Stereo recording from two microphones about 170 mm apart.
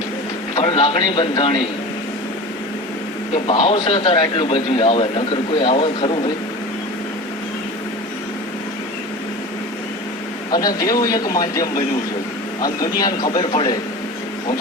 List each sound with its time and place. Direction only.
0.5 s a man's voice: 30° left (ahead or behind)
3.3 s a man's voice: 35° left (ahead or behind)
10.5 s speech: 25° left (ahead or behind)